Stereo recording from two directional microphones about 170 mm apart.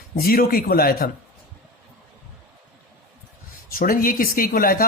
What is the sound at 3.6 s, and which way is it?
Speech, 60° left (ahead or behind).